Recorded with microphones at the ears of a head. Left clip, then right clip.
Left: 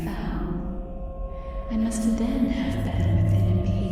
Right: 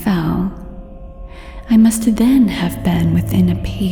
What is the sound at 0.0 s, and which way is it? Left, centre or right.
Sigh, right.